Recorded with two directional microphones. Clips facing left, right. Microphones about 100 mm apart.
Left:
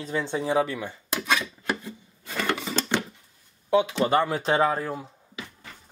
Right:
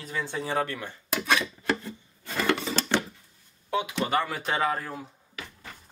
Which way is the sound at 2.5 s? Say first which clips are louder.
Even; 15° left (ahead or behind).